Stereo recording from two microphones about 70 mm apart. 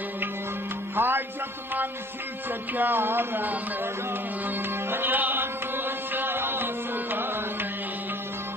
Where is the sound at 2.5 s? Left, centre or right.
Right.